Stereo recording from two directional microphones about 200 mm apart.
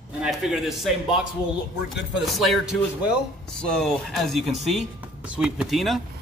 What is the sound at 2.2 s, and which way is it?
Speech, centre (ahead or behind).